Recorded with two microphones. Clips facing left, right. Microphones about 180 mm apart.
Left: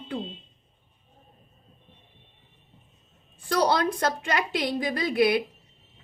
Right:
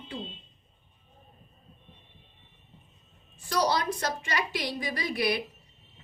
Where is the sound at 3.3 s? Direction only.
55° left (ahead or behind).